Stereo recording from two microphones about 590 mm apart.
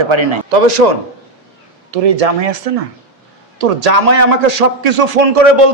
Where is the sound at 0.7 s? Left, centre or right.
Right.